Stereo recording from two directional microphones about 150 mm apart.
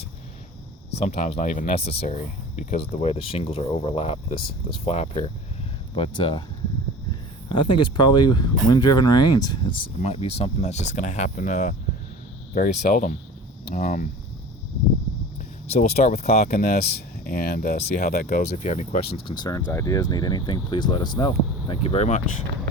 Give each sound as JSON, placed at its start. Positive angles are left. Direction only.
{"t": 0.9, "sound": "speech", "side_deg": 50}
{"t": 2.8, "sound": "speech", "side_deg": 40}
{"t": 7.5, "sound": "speech", "side_deg": 30}
{"t": 10.0, "sound": "speech", "side_deg": 45}
{"t": 12.5, "sound": "speech", "side_deg": 65}
{"t": 15.7, "sound": "speech", "side_deg": 45}
{"t": 16.5, "sound": "speech", "side_deg": 75}
{"t": 18.3, "sound": "speech", "side_deg": 55}
{"t": 19.1, "sound": "speech", "side_deg": 30}